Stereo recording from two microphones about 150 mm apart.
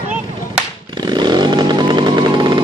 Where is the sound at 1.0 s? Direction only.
30° right (ahead or behind).